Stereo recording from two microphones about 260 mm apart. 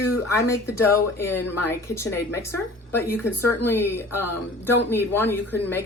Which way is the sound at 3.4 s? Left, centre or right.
Centre.